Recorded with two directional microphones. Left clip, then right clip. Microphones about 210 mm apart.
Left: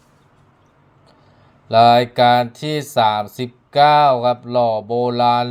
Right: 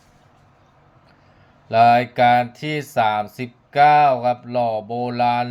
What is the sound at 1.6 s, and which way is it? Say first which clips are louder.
Speech: left 3 dB; 10° left (ahead or behind).